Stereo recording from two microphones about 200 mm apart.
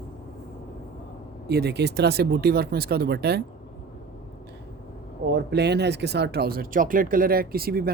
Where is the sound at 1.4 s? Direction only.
55° right (ahead or behind).